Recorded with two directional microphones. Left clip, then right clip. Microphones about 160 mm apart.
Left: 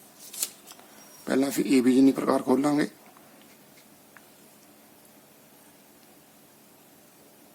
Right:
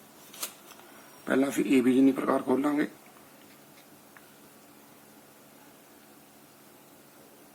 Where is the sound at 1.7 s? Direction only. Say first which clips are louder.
Left 3 dB; 35° left (ahead or behind).